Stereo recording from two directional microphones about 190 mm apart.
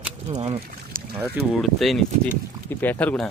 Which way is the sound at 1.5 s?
Centre (ahead or behind).